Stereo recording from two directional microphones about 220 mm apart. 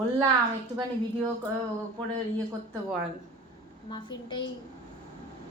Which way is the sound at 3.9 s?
20° left (ahead or behind).